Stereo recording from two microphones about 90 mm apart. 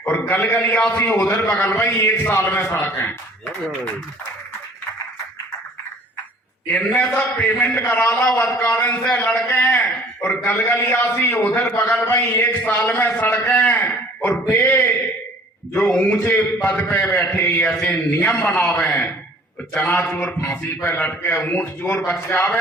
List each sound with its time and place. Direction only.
0.0 s a sound: 25° left (ahead or behind)
0.7 s a man's voice: 15° left (ahead or behind)
0.9 s a man's voice: 25° left (ahead or behind)
2.0 s a man's voice: 30° left (ahead or behind)
6.7 s a man's voice: 15° left (ahead or behind)
9.3 s a man's voice: 30° left (ahead or behind)
17.7 s a man's voice: 10° left (ahead or behind)